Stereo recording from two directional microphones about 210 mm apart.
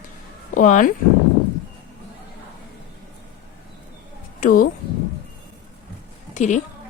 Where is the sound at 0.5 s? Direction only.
40° left (ahead or behind).